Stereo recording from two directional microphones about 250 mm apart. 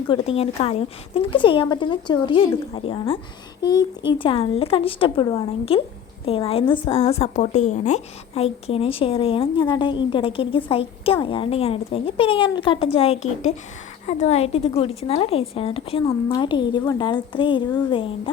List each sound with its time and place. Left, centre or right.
0.1 s a woman's voice: left